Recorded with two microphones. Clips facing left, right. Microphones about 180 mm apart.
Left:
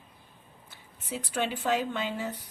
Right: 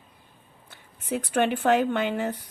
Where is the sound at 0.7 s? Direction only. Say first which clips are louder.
Right 8 dB; 60° right (ahead or behind).